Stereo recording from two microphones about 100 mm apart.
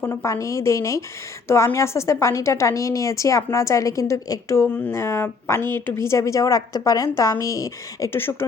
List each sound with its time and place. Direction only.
0.0 s a woman's voice: 25° left (ahead or behind)
4.7 s speech: 15° left (ahead or behind)
4.9 s a woman's voice: 25° left (ahead or behind)